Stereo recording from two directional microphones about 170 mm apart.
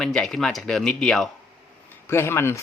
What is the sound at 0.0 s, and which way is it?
Speech, 5° left (ahead or behind).